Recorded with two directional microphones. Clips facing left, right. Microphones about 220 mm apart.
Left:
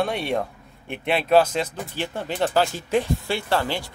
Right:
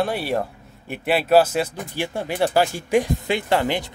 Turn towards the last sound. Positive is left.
turn(degrees=-20)  # may be behind; listen again after turning